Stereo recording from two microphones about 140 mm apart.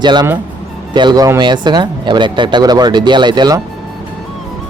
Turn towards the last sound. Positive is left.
turn(degrees=-30)  # may be behind; listen again after turning